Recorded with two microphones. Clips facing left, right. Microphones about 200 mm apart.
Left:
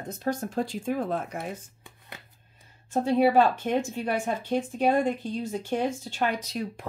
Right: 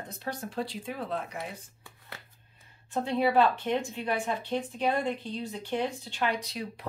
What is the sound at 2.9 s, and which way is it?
Speech, 45° left (ahead or behind).